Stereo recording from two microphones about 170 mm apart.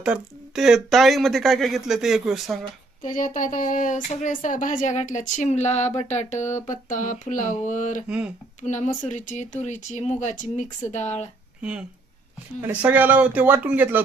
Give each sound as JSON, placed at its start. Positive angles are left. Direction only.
{"t": 0.0, "sound": "speech", "side_deg": -5}
{"t": 3.0, "sound": "speech", "side_deg": 50}
{"t": 8.0, "sound": "speech", "side_deg": -5}
{"t": 8.6, "sound": "speech", "side_deg": 45}
{"t": 11.6, "sound": "speech", "side_deg": -5}